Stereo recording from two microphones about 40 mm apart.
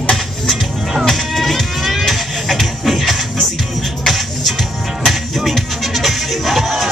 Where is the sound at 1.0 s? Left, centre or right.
Centre.